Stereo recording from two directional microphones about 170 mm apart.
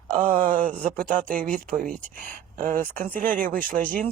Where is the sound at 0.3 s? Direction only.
50° right (ahead or behind).